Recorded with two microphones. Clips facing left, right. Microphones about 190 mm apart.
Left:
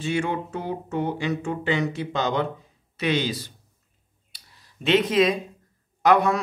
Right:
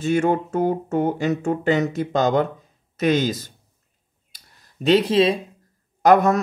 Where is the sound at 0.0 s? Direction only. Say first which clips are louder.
Right 6 dB; 45° right (ahead or behind).